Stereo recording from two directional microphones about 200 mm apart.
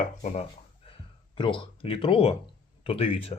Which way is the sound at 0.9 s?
25° left (ahead or behind).